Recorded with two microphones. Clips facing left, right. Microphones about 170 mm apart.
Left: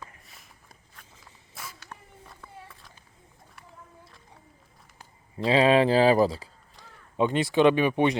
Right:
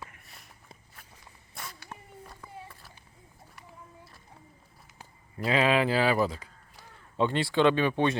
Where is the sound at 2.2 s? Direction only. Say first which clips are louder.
Even; 5° right (ahead or behind).